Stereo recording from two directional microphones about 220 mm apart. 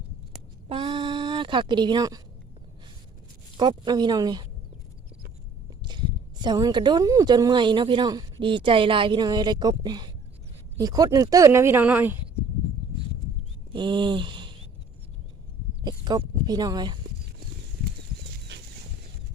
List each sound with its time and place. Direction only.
0.7 s a sound: 20° right (ahead or behind)
3.6 s speech: 20° right (ahead or behind)
5.8 s speech: 20° right (ahead or behind)
13.7 s speech: 20° right (ahead or behind)
15.8 s speech: 20° right (ahead or behind)